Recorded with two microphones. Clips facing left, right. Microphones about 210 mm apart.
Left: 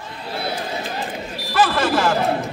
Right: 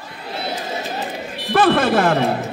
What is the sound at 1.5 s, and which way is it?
Speech, 60° right (ahead or behind).